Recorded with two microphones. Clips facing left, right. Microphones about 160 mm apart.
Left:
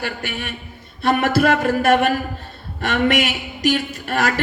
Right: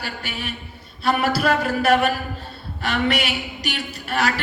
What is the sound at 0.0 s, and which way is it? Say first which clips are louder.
A woman's voice: left 4 dB; 50° left (ahead or behind).